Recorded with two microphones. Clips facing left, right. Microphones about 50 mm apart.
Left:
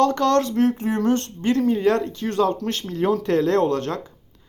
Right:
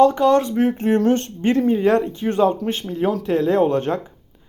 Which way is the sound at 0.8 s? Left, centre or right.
Right.